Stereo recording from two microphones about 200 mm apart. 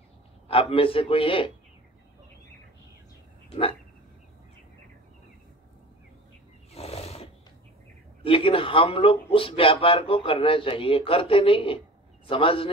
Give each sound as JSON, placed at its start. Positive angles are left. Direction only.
{"t": 0.5, "sound": "a man's voice", "side_deg": 25}
{"t": 6.7, "sound": "wild animals", "side_deg": 30}
{"t": 8.2, "sound": "a man's voice", "side_deg": 25}